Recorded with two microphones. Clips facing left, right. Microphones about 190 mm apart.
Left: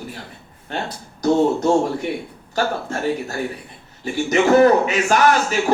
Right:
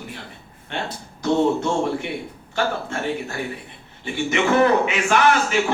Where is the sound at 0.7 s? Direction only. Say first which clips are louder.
Left 2 dB; 40° left (ahead or behind).